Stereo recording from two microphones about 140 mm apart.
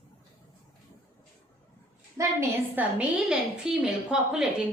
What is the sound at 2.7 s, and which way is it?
A woman's voice, 5° right (ahead or behind).